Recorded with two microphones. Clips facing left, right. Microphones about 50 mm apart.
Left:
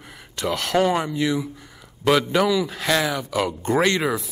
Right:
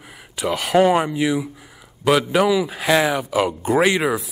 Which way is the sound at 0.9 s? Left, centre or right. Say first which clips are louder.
Right 4 dB; right.